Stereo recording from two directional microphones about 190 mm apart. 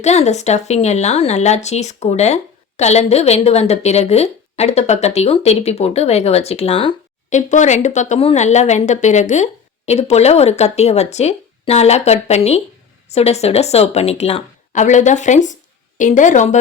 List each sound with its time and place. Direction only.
0.0 s speech: 35° left (ahead or behind)